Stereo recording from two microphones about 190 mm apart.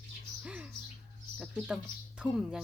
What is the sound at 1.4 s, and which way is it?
A woman's voice, 5° right (ahead or behind).